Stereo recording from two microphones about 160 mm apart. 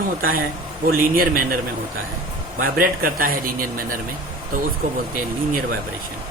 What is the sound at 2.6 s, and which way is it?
Speech, 65° right (ahead or behind).